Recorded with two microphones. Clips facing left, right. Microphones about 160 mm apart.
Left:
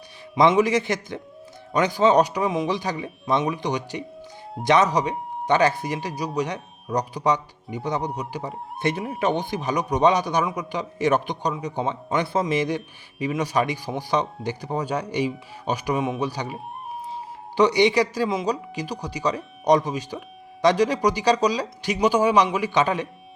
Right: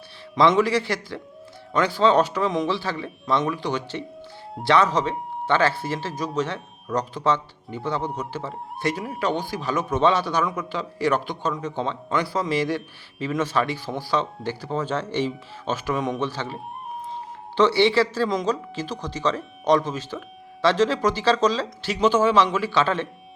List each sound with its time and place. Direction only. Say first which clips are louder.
0.3 s a man's voice: left 1 dB; 15° left (ahead or behind)
17.6 s a man's voice: even; 15° left (ahead or behind)